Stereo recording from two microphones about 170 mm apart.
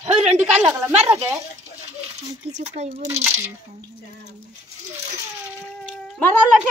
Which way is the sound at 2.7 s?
40° right (ahead or behind).